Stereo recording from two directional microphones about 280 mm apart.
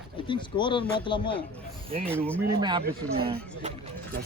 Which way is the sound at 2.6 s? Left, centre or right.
Centre.